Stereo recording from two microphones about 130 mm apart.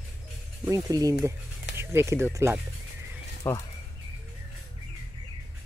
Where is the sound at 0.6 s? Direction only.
25° right (ahead or behind).